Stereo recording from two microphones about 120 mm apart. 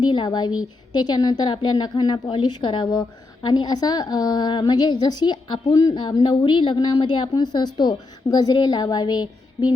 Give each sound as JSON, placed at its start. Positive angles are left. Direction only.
{"t": 0.0, "sound": "a woman's voice", "side_deg": 40}